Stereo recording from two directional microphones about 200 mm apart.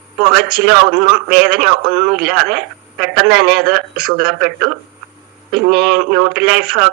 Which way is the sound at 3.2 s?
50° right (ahead or behind).